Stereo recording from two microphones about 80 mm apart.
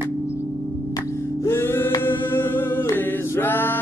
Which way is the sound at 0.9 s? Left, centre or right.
Left.